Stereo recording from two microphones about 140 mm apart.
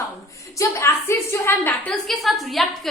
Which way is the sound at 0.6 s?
20° left (ahead or behind).